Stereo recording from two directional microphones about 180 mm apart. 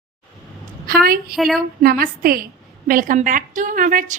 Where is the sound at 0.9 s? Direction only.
55° right (ahead or behind).